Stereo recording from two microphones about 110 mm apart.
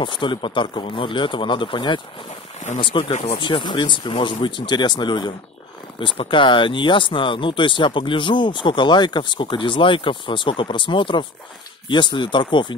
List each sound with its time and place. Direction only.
0.0 s speech: 45° left (ahead or behind)
3.1 s speech: 90° left
3.3 s speech: 45° left (ahead or behind)